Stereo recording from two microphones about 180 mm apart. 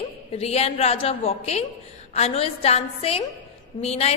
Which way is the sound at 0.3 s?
35° left (ahead or behind).